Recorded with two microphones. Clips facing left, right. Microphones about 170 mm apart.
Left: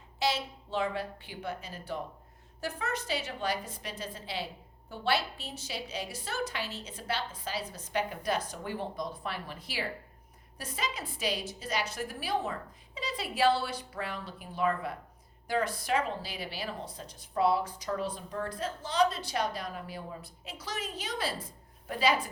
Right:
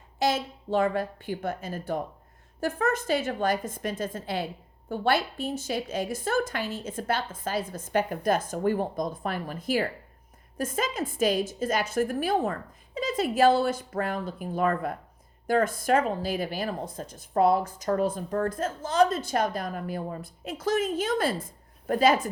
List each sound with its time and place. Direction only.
0.2 s speech: 50° right (ahead or behind)